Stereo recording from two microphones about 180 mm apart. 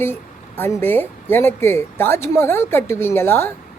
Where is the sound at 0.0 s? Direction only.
10° left (ahead or behind).